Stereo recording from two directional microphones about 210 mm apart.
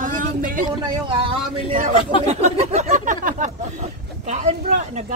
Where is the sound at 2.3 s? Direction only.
30° right (ahead or behind).